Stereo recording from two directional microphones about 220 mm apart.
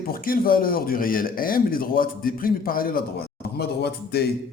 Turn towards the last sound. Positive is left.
turn(degrees=45)  # may be behind; listen again after turning